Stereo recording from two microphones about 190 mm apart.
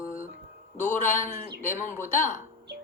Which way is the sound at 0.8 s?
40° left (ahead or behind).